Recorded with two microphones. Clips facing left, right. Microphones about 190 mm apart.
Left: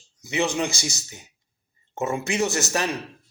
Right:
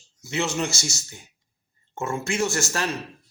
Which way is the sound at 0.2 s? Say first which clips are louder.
Left 2 dB; 15° left (ahead or behind).